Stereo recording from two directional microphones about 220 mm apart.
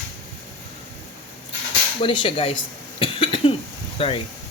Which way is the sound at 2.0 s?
25° left (ahead or behind).